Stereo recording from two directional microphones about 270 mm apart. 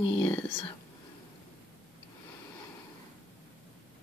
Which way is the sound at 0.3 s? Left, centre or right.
Centre.